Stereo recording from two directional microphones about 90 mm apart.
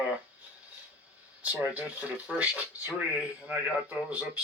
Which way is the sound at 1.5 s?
15° right (ahead or behind).